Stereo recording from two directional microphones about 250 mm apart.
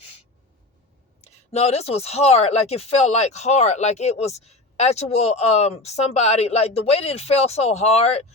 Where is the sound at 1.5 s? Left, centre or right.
Left.